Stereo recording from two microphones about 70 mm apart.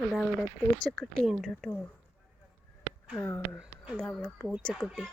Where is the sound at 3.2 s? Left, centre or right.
Left.